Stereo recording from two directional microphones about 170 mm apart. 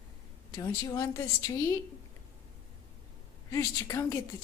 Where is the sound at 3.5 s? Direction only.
20° left (ahead or behind).